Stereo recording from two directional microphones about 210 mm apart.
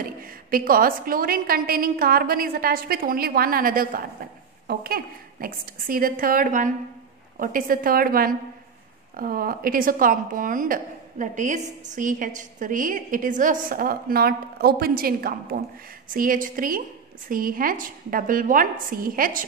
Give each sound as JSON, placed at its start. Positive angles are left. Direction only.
{"t": 0.2, "sound": "a woman's voice", "side_deg": -40}